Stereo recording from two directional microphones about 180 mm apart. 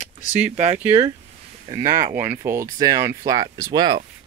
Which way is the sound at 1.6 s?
20° right (ahead or behind).